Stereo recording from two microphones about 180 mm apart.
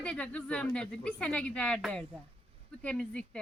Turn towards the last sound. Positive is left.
turn(degrees=5)  # may be behind; listen again after turning